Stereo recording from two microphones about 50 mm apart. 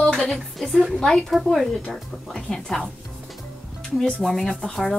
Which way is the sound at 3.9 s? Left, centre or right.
Centre.